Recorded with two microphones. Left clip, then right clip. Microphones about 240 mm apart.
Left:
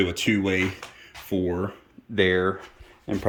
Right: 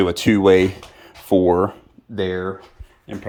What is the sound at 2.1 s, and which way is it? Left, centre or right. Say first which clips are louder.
Speech: left 2 dB; centre.